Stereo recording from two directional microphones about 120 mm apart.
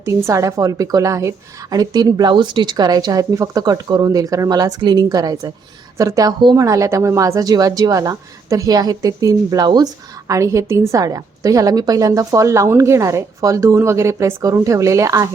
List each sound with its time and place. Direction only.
0.0 s a woman's voice: 25° right (ahead or behind)